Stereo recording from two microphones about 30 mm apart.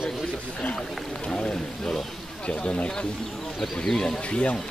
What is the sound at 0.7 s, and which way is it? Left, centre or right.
Speech, left.